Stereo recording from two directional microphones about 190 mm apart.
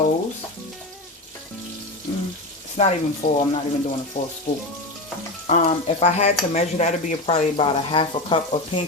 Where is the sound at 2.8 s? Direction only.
35° left (ahead or behind).